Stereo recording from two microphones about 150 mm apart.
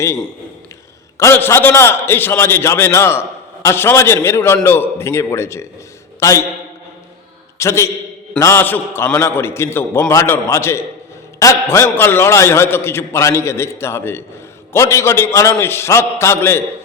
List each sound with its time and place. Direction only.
1.2 s a man's voice: 15° left (ahead or behind)
7.6 s a man's voice: 20° left (ahead or behind)